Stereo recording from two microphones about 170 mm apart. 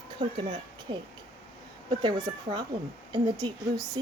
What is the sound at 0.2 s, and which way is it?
Speech, 30° right (ahead or behind).